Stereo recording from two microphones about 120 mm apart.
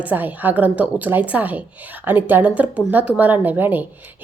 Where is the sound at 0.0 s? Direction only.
15° right (ahead or behind).